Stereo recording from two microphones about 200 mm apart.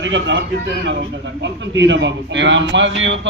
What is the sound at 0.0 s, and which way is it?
A man's voice, 65° right (ahead or behind).